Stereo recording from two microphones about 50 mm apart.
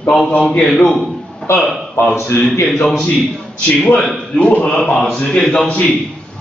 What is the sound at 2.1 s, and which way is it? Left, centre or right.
Speech, left.